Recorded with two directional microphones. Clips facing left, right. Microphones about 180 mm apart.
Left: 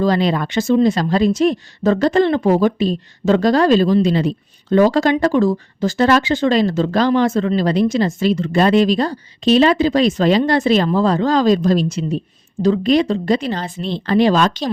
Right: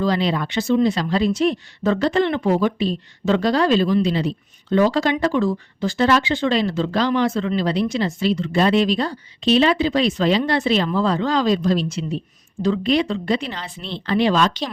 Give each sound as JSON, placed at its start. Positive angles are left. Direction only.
{"t": 0.0, "sound": "speech", "side_deg": 45}